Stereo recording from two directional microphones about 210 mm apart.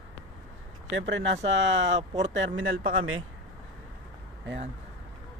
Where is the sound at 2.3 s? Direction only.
65° right (ahead or behind).